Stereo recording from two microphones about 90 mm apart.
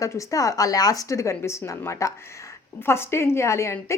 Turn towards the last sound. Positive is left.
turn(degrees=30)  # may be behind; listen again after turning